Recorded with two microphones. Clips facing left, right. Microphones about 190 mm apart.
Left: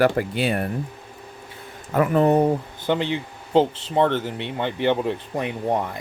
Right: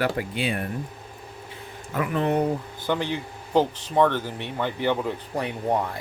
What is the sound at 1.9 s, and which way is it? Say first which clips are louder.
Speech: left 6 dB; 45° left (ahead or behind).